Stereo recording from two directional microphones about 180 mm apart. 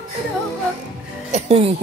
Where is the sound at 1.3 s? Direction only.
40° right (ahead or behind).